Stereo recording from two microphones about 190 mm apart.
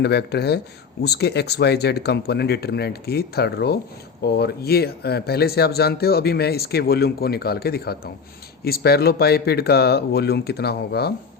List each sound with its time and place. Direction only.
0.0 s speech: 60° left (ahead or behind)